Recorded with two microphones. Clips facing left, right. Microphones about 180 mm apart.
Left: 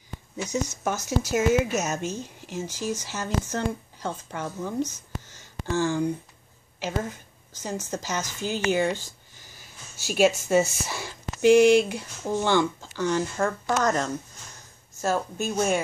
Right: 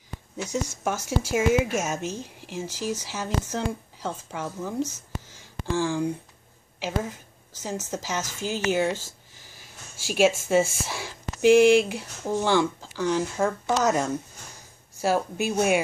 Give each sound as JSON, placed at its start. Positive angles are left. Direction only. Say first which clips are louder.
{"t": 0.4, "sound": "speech", "louder": "left 1 dB", "side_deg": -5}